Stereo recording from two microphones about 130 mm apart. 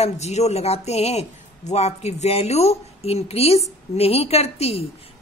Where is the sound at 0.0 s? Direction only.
60° left (ahead or behind).